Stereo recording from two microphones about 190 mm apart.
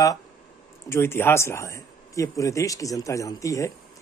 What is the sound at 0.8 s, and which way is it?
Speech, 10° left (ahead or behind).